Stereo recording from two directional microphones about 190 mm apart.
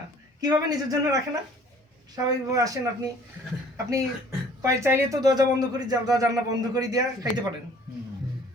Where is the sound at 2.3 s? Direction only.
20° right (ahead or behind).